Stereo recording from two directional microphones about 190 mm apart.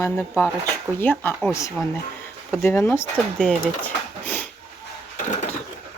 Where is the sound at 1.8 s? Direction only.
5° right (ahead or behind).